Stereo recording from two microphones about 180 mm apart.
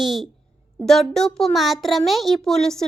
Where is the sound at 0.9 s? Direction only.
Centre (ahead or behind).